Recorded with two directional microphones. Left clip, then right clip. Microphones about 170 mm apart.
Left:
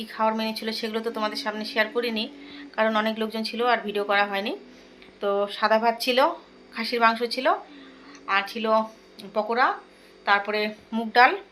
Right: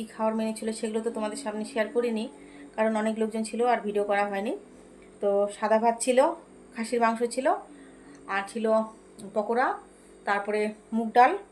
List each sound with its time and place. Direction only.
0.0 s speech: 10° right (ahead or behind)